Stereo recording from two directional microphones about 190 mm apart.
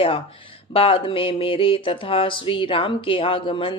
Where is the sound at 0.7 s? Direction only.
30° left (ahead or behind).